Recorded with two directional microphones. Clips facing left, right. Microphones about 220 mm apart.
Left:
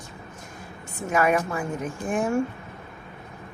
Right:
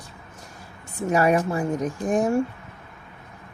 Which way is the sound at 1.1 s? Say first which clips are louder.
Right 2 dB; 35° right (ahead or behind).